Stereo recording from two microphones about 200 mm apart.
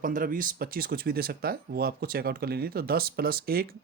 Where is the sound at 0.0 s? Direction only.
45° right (ahead or behind).